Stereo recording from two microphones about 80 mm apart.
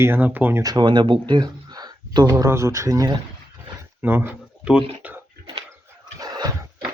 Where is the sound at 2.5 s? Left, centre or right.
Right.